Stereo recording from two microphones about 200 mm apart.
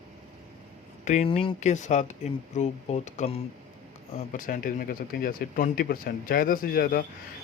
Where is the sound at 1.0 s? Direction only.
35° left (ahead or behind).